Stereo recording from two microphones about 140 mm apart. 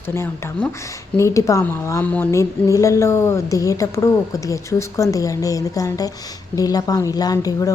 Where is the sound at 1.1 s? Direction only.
20° left (ahead or behind).